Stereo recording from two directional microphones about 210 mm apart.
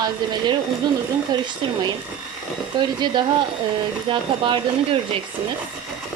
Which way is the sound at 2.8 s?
20° right (ahead or behind).